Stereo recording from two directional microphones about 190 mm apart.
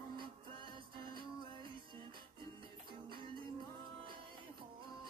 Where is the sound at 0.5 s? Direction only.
25° right (ahead or behind).